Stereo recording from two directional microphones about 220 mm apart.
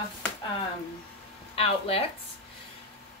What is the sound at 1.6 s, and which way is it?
Speech, 25° left (ahead or behind).